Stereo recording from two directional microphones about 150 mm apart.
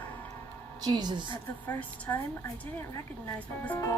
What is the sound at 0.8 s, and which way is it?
Speech, 25° right (ahead or behind).